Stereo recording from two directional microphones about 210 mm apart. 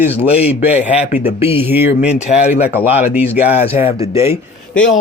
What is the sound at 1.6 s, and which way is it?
Speech, 10° right (ahead or behind).